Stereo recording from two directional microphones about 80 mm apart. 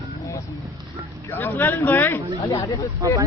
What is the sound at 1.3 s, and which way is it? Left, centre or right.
Speech, left.